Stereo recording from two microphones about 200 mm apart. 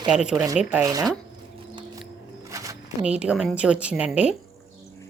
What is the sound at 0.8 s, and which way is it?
Speech, 20° right (ahead or behind).